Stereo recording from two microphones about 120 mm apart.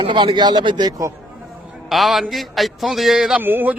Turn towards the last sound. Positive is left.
turn(degrees=-15)  # may be behind; listen again after turning